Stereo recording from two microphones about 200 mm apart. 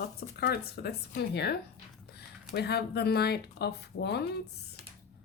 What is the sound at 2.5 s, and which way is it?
Speech, 55° left (ahead or behind).